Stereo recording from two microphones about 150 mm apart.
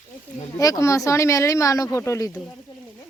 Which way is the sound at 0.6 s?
25° left (ahead or behind).